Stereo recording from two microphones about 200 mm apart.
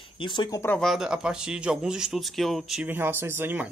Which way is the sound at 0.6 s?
5° left (ahead or behind).